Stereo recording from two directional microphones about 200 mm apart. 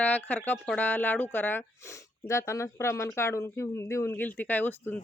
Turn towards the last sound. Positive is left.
turn(degrees=10)  # may be behind; listen again after turning